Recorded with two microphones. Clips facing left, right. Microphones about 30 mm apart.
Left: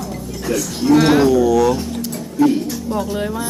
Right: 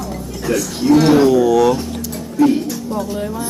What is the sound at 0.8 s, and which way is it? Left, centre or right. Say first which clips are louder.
Speech: right 1 dB; centre.